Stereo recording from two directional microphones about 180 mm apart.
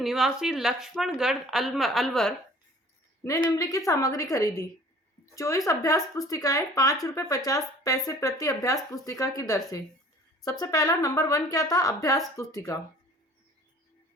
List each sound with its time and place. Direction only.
0.0 s a woman's voice: centre (ahead or behind)
3.2 s a woman's voice: 15° left (ahead or behind)